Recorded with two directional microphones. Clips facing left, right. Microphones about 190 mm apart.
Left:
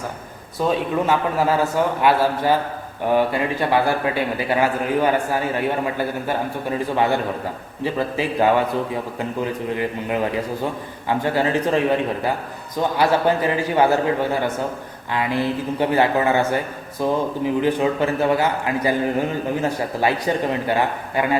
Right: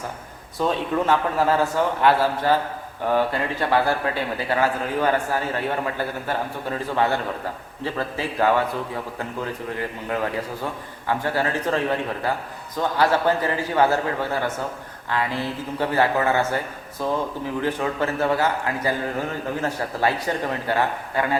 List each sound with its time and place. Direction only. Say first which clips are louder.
0.7 s a man's voice: left 2 dB; 10° left (ahead or behind)